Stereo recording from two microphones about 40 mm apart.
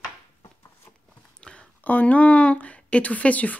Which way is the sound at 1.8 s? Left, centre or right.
Left.